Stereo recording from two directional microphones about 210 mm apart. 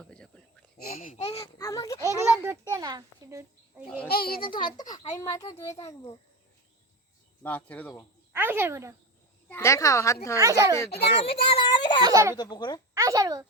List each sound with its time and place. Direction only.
0.0 s a sound: 5° left (ahead or behind)
0.9 s speech: 40° left (ahead or behind)
1.4 s a child's voice: 15° left (ahead or behind)
2.0 s a child's voice: 10° right (ahead or behind)
4.1 s a child's voice: 45° left (ahead or behind)
4.4 s a child's voice: 25° left (ahead or behind)
7.4 s a child's voice: 10° left (ahead or behind)
8.3 s speech: 10° right (ahead or behind)
9.5 s a child's voice: 15° left (ahead or behind)
10.4 s speech: 15° right (ahead or behind)
11.2 s a child's voice: 25° left (ahead or behind)
12.0 s speech: 15° right (ahead or behind)
12.4 s a child's voice: 20° left (ahead or behind)
12.9 s a child's voice: 15° right (ahead or behind)